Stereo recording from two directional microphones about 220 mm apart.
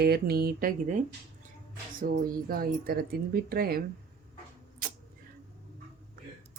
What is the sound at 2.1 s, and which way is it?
A woman's voice, 40° right (ahead or behind).